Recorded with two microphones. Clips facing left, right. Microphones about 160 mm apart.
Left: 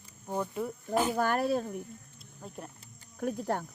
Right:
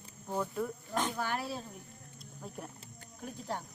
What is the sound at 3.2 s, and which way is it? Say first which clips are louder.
Speech: left 8 dB; 55° left (ahead or behind).